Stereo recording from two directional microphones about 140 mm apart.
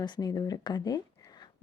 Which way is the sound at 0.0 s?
30° left (ahead or behind).